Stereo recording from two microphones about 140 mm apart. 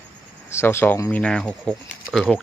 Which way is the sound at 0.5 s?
15° left (ahead or behind).